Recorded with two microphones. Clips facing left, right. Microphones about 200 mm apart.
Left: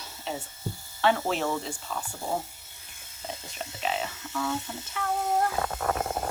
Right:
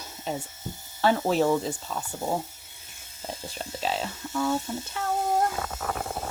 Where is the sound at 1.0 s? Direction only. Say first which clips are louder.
Right 3 dB; 40° right (ahead or behind).